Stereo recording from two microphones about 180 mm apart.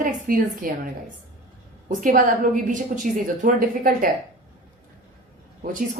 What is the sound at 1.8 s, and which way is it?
Speech, 45° right (ahead or behind).